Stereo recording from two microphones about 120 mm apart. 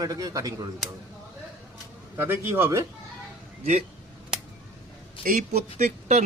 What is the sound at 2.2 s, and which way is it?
Speech, 20° right (ahead or behind).